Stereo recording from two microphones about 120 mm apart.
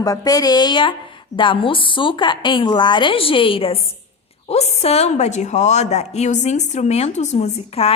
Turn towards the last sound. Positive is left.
turn(degrees=55)  # may be behind; listen again after turning